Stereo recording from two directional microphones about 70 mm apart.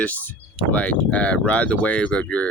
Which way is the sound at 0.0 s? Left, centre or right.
Left.